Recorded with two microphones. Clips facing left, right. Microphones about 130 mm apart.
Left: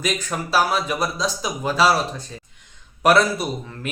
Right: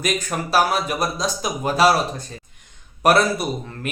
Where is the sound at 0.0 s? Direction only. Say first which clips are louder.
Right 1 dB; 50° right (ahead or behind).